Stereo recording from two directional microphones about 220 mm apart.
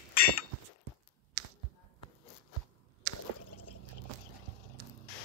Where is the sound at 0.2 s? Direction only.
40° left (ahead or behind).